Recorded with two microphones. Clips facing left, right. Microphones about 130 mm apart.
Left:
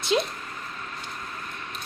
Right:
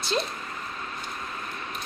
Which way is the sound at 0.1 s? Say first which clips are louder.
Left 4 dB; 10° left (ahead or behind).